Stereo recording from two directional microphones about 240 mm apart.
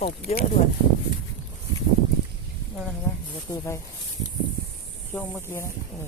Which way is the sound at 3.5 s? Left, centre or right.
Centre.